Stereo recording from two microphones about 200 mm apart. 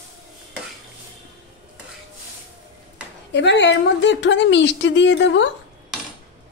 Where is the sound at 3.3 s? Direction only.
60° left (ahead or behind).